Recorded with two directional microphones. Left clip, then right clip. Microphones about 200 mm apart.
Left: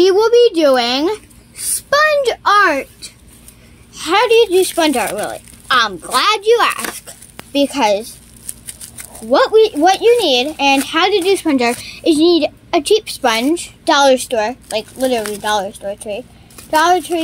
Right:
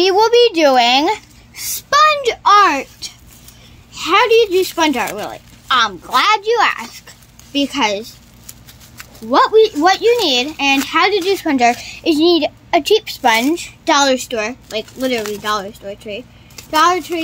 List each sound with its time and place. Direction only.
0.0 s a child's voice: 25° right (ahead or behind)
1.6 s a child's voice: 5° right (ahead or behind); by 3.1 s 25° right (ahead or behind)
3.9 s a woman's voice: centre (ahead or behind)
9.3 s a woman's voice: centre (ahead or behind)